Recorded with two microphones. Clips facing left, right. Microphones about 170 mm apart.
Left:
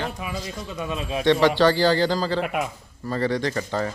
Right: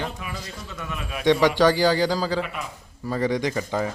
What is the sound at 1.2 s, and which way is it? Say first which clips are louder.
Speech: even; 15° right (ahead or behind).